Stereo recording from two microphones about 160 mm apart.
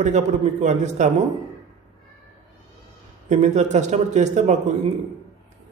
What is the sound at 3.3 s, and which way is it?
A man's voice, 45° right (ahead or behind).